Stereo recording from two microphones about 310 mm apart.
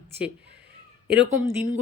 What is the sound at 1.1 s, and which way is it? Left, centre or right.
Speech, right.